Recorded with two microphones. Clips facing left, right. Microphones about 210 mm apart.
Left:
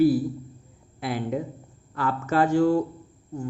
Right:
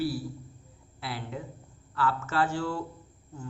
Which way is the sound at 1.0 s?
15° left (ahead or behind).